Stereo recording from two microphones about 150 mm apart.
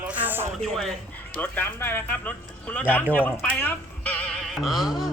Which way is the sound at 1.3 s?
10° left (ahead or behind).